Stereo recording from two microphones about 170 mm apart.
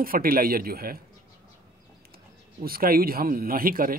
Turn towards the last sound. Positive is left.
turn(degrees=-55)  # may be behind; listen again after turning